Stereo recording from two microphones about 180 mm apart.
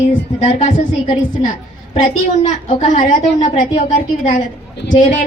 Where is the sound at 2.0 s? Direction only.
40° left (ahead or behind).